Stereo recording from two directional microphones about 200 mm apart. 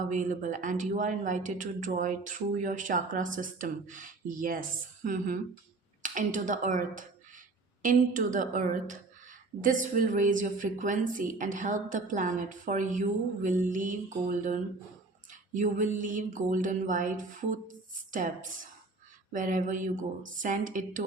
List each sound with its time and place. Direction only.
0.1 s speech: 40° right (ahead or behind)